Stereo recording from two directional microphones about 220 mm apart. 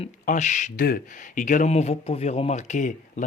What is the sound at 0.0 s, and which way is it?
Speech, 30° left (ahead or behind).